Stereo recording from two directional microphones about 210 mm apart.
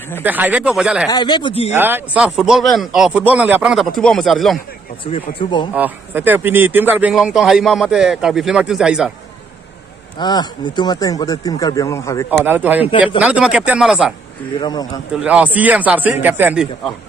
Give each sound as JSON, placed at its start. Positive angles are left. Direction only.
{"t": 0.2, "sound": "speech", "side_deg": -10}
{"t": 1.0, "sound": "a man's voice", "side_deg": 20}
{"t": 1.7, "sound": "speech", "side_deg": -10}
{"t": 5.0, "sound": "a man's voice", "side_deg": 25}
{"t": 5.8, "sound": "speech", "side_deg": -10}
{"t": 10.1, "sound": "speech", "side_deg": 20}
{"t": 12.4, "sound": "a man's voice", "side_deg": -10}
{"t": 14.6, "sound": "a man's voice", "side_deg": 20}
{"t": 15.2, "sound": "a man's voice", "side_deg": -5}